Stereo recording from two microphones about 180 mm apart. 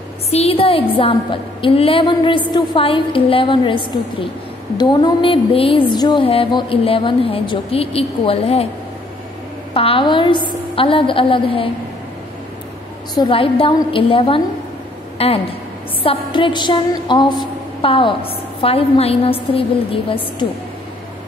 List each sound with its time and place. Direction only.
0.3 s a woman's voice: 35° left (ahead or behind)
9.8 s a woman's voice: 30° left (ahead or behind)
13.1 s a woman's voice: 25° left (ahead or behind)